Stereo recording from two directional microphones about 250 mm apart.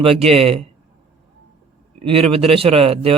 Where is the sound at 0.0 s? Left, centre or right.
Right.